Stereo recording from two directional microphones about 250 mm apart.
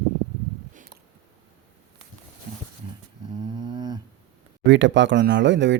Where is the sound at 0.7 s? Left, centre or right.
Right.